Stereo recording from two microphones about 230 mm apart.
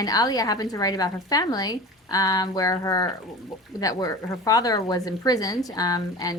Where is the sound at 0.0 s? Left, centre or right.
Centre.